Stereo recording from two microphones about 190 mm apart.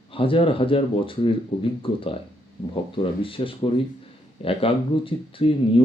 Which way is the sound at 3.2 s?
30° left (ahead or behind).